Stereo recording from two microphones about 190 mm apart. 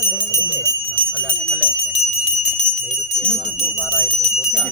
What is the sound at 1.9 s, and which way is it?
Bell, 35° left (ahead or behind).